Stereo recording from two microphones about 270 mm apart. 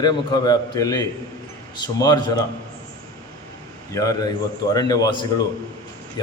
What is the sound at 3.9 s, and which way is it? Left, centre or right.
A man's voice, centre.